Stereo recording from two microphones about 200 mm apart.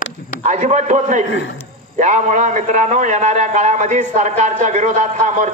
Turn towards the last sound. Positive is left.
turn(degrees=-35)  # may be behind; listen again after turning